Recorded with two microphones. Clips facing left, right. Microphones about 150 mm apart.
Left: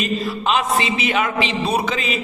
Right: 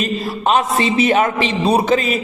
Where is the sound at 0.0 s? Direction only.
40° right (ahead or behind).